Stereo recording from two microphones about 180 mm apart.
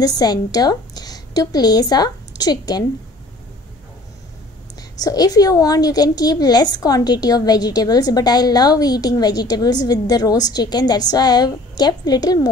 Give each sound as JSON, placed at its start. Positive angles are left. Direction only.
{"t": 0.0, "sound": "a woman's voice", "side_deg": 20}
{"t": 4.7, "sound": "a woman's voice", "side_deg": 20}